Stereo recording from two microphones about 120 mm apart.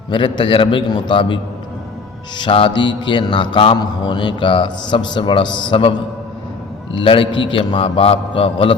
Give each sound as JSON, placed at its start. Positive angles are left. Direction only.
{"t": 0.1, "sound": "a man's voice", "side_deg": 45}
{"t": 2.4, "sound": "mantra", "side_deg": 45}
{"t": 6.9, "sound": "a man's voice", "side_deg": 45}